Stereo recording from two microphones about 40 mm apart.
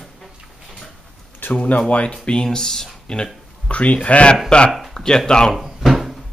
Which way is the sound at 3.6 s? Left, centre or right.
Left.